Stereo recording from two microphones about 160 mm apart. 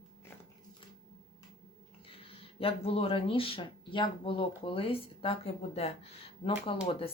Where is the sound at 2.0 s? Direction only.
35° left (ahead or behind).